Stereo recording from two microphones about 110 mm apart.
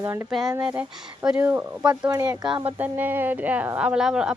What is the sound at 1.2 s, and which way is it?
Speech, 15° right (ahead or behind).